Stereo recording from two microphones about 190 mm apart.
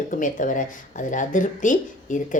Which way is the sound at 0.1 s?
45° left (ahead or behind).